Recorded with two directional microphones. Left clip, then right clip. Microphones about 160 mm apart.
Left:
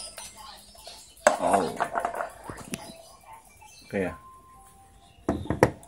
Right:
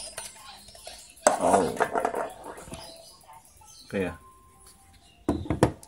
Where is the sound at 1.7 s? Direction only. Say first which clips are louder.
Right 2 dB; 20° right (ahead or behind).